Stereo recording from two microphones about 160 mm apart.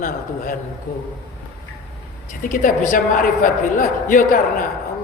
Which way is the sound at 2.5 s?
55° left (ahead or behind).